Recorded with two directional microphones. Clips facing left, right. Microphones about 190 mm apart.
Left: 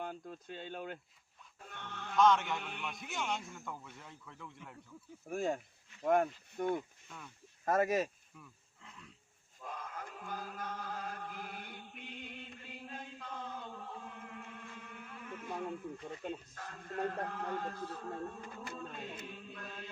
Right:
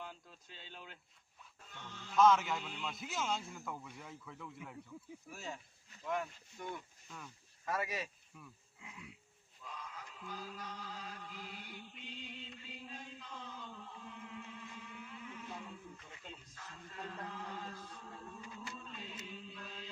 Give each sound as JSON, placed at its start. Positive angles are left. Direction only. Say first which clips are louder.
{"t": 0.0, "sound": "speech", "louder": "left 8 dB", "side_deg": 50}
{"t": 1.6, "sound": "music", "louder": "left 6 dB", "side_deg": 60}
{"t": 2.1, "sound": "a man's voice", "louder": "even", "side_deg": 0}
{"t": 2.6, "sound": "music", "louder": "left 2 dB", "side_deg": 60}
{"t": 3.0, "sound": "a man's voice", "louder": "even", "side_deg": 0}
{"t": 5.3, "sound": "speech", "louder": "left 13 dB", "side_deg": 50}
{"t": 8.4, "sound": "speech", "louder": "right 1 dB", "side_deg": -10}
{"t": 9.6, "sound": "chant", "louder": "left 5 dB", "side_deg": 55}
{"t": 16.0, "sound": "speech", "louder": "left 13 dB", "side_deg": 40}
{"t": 16.2, "sound": "a man's voice", "louder": "left 11 dB", "side_deg": 55}